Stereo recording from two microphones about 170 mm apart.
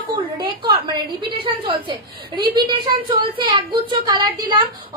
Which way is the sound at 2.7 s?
30° right (ahead or behind).